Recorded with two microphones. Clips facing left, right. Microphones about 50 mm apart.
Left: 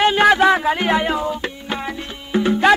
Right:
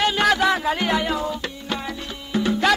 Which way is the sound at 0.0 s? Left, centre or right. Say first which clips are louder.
Left 5 dB; left.